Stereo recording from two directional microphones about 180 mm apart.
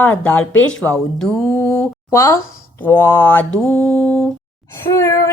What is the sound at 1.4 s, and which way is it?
Speech, 15° left (ahead or behind).